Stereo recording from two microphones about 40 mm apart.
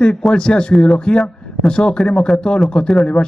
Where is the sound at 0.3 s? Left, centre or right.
Left.